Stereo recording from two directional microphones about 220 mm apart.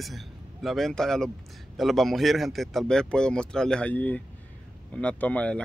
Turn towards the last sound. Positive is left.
turn(degrees=5)  # may be behind; listen again after turning